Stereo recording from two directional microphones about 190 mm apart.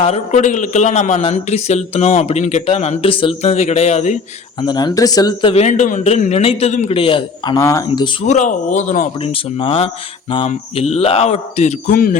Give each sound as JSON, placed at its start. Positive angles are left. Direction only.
{"t": 0.0, "sound": "a man's voice", "side_deg": 35}
{"t": 4.6, "sound": "speech", "side_deg": 25}
{"t": 8.3, "sound": "a man's voice", "side_deg": 40}